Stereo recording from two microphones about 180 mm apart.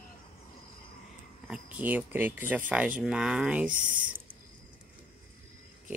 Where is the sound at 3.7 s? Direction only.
50° right (ahead or behind).